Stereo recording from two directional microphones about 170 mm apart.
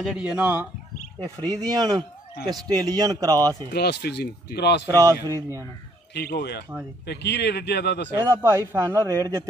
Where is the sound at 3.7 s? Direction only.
70° left (ahead or behind).